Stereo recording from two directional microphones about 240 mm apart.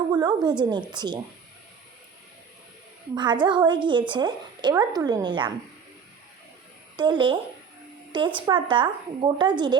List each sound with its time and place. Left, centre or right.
0.1 s a woman's voice: centre
3.2 s a woman's voice: centre
6.9 s a woman's voice: centre